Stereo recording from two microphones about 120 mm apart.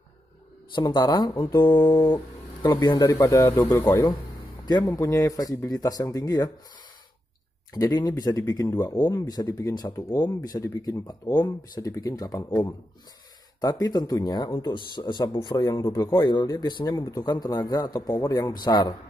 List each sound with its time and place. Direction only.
0.7 s speech: 35° left (ahead or behind)
3.9 s speech: 40° left (ahead or behind)
4.8 s speech: 25° left (ahead or behind)
7.7 s speech: 35° left (ahead or behind)
13.6 s speech: 30° left (ahead or behind)